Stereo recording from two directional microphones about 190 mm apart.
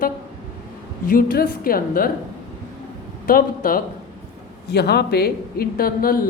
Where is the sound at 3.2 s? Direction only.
50° left (ahead or behind).